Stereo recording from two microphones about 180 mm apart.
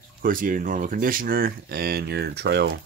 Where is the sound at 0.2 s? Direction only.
50° right (ahead or behind).